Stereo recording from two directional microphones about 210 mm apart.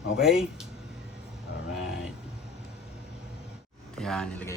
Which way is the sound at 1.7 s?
5° right (ahead or behind).